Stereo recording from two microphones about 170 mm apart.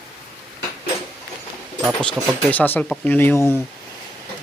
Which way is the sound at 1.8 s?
5° left (ahead or behind).